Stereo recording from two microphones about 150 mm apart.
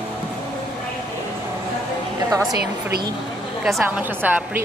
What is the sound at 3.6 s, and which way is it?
Speech, 5° right (ahead or behind).